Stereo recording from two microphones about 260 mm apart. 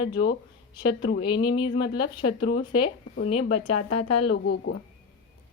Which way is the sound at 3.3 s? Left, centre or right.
Left.